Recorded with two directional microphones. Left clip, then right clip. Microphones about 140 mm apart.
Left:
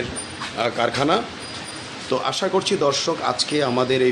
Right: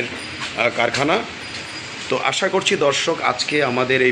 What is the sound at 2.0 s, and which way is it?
Speech, 5° left (ahead or behind).